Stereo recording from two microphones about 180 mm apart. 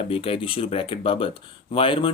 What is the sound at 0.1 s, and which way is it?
Speech, 30° left (ahead or behind).